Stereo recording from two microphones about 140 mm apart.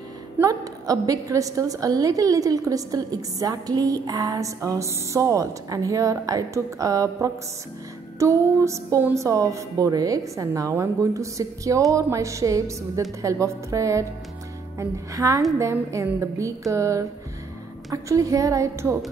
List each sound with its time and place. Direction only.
0.4 s a woman's voice: 25° right (ahead or behind)